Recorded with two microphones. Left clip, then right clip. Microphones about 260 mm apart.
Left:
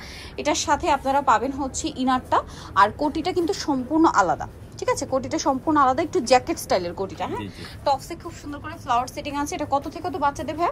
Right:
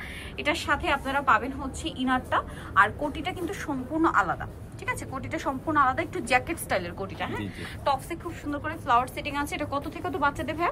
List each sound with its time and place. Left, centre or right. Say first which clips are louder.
0.4 s a woman's voice: left 4 dB; centre